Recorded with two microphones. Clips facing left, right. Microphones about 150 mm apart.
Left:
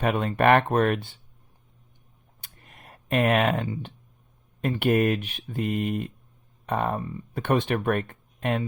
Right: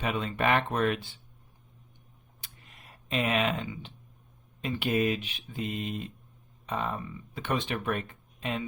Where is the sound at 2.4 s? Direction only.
50° left (ahead or behind).